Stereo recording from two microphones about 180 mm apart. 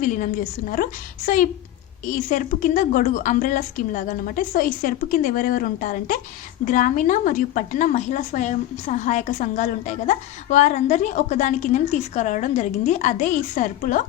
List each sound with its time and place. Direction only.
0.0 s speech: 45° left (ahead or behind)